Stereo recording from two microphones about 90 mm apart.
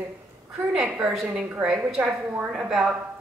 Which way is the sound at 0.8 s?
15° right (ahead or behind).